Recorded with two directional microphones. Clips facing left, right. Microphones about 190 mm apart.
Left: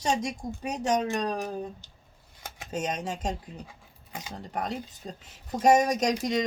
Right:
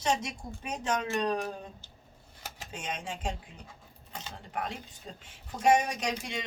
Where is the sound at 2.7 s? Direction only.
40° left (ahead or behind).